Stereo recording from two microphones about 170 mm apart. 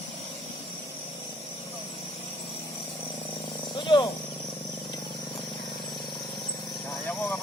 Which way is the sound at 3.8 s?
25° left (ahead or behind).